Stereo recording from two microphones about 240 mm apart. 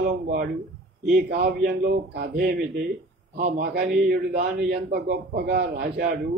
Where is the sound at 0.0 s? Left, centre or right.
Right.